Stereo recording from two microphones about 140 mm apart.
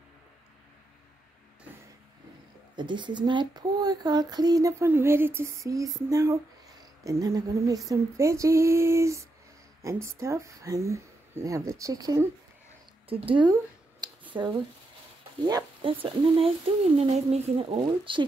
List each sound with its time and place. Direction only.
2.7 s speech: 35° right (ahead or behind)
13.1 s speech: 40° right (ahead or behind)